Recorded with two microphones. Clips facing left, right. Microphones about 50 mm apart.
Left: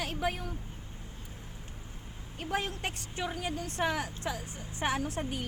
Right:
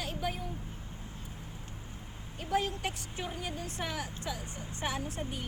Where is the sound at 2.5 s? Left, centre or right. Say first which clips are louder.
Right 2 dB; left.